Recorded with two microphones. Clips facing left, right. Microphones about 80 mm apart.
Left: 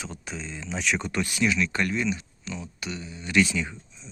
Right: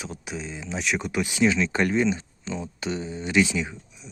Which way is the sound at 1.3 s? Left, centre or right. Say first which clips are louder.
Right 4 dB; right.